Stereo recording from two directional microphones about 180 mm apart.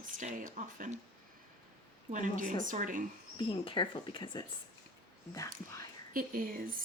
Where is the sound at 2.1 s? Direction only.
45° right (ahead or behind).